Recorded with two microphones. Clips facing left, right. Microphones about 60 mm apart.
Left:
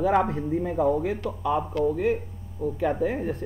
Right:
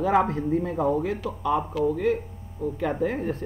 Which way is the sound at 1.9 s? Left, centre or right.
Centre.